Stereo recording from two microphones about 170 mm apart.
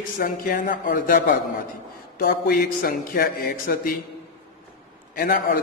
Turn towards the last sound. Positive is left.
turn(degrees=55)  # may be behind; listen again after turning